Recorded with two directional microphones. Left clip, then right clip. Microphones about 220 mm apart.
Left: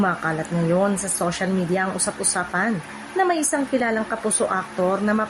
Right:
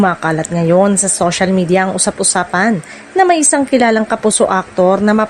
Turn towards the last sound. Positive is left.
turn(degrees=-40)  # may be behind; listen again after turning